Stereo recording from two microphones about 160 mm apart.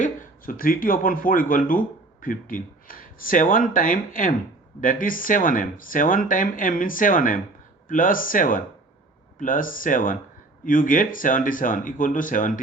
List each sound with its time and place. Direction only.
0.0 s speech: 55° left (ahead or behind)